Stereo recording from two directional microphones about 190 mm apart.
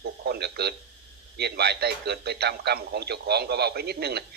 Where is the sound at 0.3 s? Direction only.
60° right (ahead or behind).